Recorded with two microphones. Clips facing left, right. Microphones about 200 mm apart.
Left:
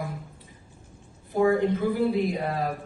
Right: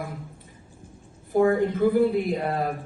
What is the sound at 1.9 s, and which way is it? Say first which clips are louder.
Speech: right 3 dB; 55° right (ahead or behind).